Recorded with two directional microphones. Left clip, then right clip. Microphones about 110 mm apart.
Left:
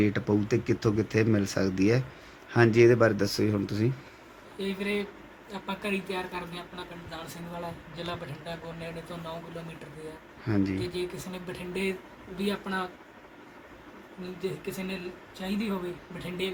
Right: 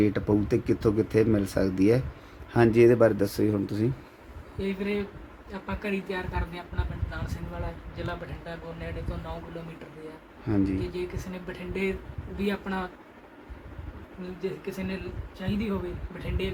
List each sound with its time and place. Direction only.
0.0 s speech: 15° right (ahead or behind)
10.4 s speech: 10° right (ahead or behind)
12.5 s speech: 20° right (ahead or behind)
14.4 s speech: 10° right (ahead or behind)